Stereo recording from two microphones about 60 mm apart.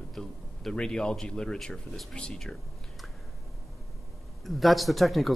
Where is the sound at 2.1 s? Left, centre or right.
Centre.